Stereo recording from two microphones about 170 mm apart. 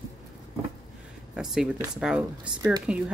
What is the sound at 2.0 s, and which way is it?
A woman's voice, 5° right (ahead or behind).